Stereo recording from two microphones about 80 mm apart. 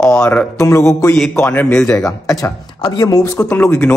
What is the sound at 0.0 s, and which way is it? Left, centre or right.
Speech, centre.